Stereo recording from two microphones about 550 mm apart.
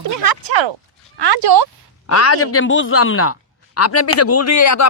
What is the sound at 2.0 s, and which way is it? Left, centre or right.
Speech, left.